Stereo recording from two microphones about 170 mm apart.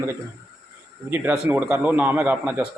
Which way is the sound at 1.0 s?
10° right (ahead or behind).